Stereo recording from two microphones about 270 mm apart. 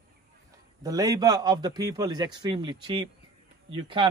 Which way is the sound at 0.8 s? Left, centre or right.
Centre.